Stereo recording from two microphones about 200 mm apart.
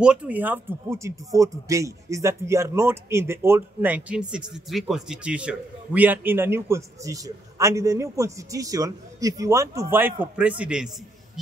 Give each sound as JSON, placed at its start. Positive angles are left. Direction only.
{"t": 0.0, "sound": "a man's voice", "side_deg": -5}